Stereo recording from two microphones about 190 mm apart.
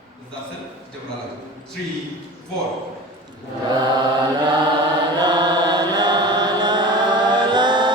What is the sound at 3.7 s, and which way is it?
Mantra, 20° right (ahead or behind).